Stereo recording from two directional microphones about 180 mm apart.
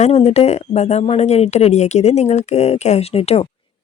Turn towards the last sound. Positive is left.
turn(degrees=35)  # may be behind; listen again after turning